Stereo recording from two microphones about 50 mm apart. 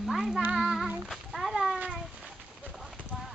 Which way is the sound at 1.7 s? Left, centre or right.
Centre.